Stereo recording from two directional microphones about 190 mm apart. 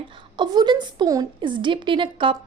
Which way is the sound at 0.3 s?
20° right (ahead or behind).